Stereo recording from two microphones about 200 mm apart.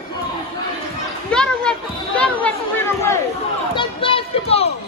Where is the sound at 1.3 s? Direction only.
5° left (ahead or behind).